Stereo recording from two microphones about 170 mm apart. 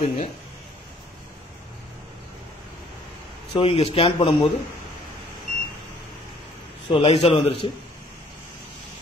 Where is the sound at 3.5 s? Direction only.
35° left (ahead or behind).